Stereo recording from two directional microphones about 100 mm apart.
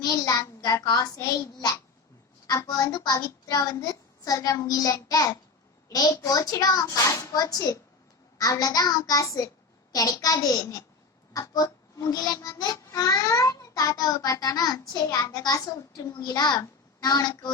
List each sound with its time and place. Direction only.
0.0 s a child's voice: 35° left (ahead or behind)
2.5 s a child's voice: 35° left (ahead or behind)